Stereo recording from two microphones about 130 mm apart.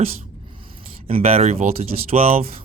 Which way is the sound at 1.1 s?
50° right (ahead or behind).